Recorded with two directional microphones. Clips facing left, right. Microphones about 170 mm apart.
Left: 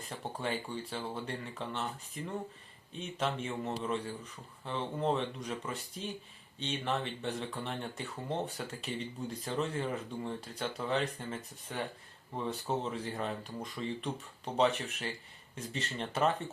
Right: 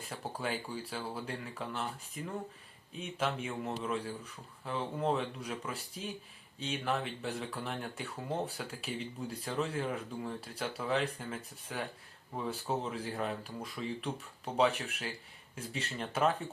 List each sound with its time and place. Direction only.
0.1 s speech: 5° right (ahead or behind)